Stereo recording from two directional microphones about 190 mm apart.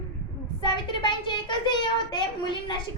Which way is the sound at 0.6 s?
25° left (ahead or behind).